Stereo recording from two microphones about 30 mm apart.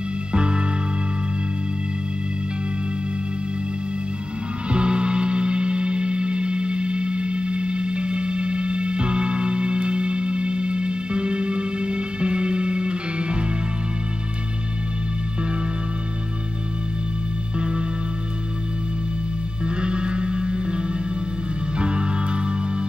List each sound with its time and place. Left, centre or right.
0.3 s music: right
4.6 s music: right
17.6 s music: right
19.6 s music: right